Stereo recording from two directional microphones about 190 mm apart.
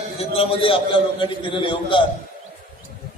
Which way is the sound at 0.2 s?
30° left (ahead or behind).